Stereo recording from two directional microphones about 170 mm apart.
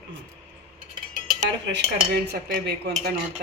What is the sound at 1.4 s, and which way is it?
Speech, 90° right.